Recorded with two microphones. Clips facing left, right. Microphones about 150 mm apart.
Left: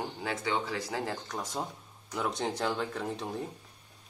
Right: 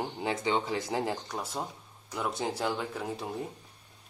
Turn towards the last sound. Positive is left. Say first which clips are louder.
# even
turn(degrees=-5)  # may be behind; listen again after turning